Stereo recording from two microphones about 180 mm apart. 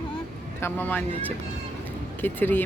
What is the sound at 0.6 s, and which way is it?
Speech, 10° left (ahead or behind).